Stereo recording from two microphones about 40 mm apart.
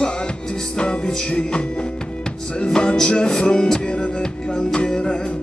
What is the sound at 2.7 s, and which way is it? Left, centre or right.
Music, centre.